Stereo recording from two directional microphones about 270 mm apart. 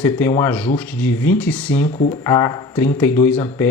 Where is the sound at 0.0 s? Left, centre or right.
Centre.